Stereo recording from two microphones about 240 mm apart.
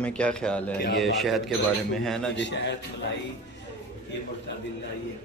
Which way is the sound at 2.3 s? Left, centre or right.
Left.